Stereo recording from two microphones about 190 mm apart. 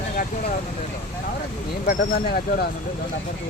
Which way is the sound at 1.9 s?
55° left (ahead or behind).